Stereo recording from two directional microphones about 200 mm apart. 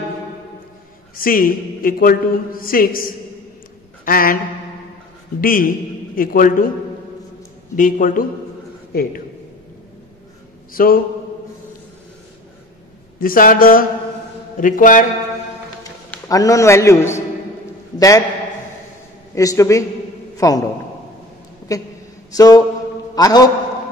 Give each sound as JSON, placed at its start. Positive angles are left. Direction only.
{"t": 1.1, "sound": "a man's voice", "side_deg": 45}
{"t": 4.0, "sound": "a sound", "side_deg": 45}
{"t": 5.4, "sound": "a man's voice", "side_deg": 45}
{"t": 7.7, "sound": "a man's voice", "side_deg": 40}
{"t": 10.7, "sound": "mantra", "side_deg": 45}
{"t": 13.2, "sound": "a man's voice", "side_deg": 45}
{"t": 16.1, "sound": "a man's voice", "side_deg": 15}
{"t": 19.3, "sound": "a man's voice", "side_deg": 15}
{"t": 21.7, "sound": "a man's voice", "side_deg": 15}
{"t": 22.3, "sound": "a sound", "side_deg": 20}
{"t": 23.1, "sound": "a man's voice", "side_deg": 20}